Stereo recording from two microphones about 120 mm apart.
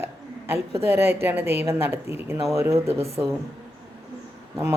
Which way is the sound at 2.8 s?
60° right (ahead or behind).